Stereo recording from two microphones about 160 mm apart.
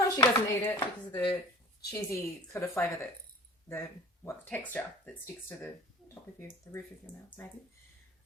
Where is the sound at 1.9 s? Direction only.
15° left (ahead or behind).